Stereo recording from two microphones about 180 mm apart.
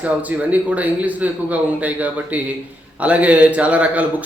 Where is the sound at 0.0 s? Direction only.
10° right (ahead or behind).